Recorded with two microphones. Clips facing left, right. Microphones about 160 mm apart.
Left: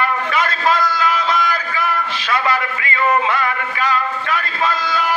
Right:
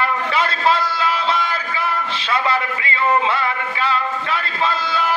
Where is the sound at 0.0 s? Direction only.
30° right (ahead or behind).